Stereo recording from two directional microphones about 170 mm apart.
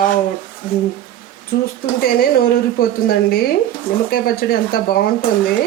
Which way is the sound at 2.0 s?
60° left (ahead or behind).